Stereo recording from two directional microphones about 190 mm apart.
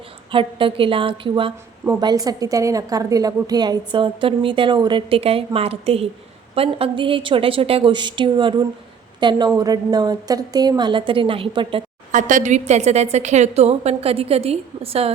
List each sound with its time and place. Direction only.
0.3 s a woman's voice: 25° right (ahead or behind)
12.1 s a woman's voice: 40° right (ahead or behind)